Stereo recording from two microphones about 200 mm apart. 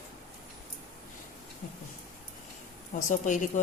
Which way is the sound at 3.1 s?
40° left (ahead or behind).